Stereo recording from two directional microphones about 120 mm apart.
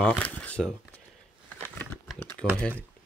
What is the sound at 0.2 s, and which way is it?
Shuffling cards, 10° left (ahead or behind).